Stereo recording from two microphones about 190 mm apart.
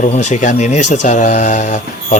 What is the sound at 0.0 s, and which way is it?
Speech, 40° left (ahead or behind).